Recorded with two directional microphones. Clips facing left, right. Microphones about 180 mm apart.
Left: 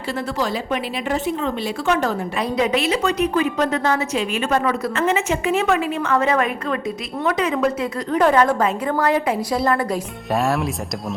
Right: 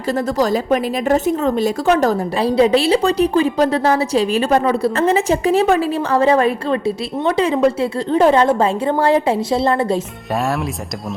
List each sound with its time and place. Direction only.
0.1 s a woman's voice: 40° right (ahead or behind)
10.3 s speech: centre (ahead or behind)